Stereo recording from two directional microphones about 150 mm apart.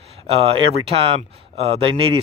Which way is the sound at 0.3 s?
40° right (ahead or behind).